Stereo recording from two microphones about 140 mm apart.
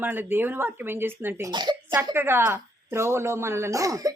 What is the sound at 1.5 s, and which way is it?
Speech, 30° right (ahead or behind).